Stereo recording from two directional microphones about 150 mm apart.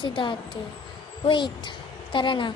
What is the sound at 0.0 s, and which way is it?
A woman's voice, 35° left (ahead or behind).